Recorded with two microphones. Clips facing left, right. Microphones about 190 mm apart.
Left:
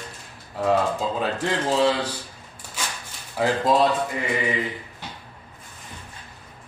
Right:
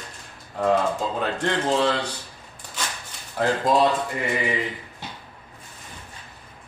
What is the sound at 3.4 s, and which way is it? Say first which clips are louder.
Speech: even; 5° left (ahead or behind).